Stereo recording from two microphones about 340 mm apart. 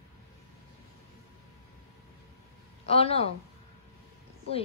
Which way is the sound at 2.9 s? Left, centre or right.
Centre.